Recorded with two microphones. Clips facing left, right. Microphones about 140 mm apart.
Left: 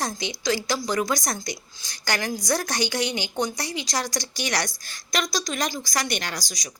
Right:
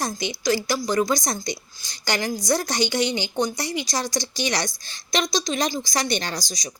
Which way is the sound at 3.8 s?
15° right (ahead or behind).